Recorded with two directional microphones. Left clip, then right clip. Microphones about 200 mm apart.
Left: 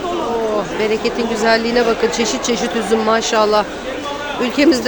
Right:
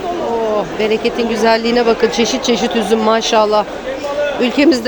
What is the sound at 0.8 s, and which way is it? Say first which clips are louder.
Speech: right 3 dB; 15° right (ahead or behind).